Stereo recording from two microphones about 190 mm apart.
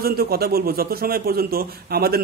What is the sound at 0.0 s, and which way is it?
A man's voice, 55° right (ahead or behind).